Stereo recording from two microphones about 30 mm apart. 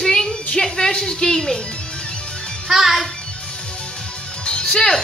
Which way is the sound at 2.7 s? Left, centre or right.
Centre.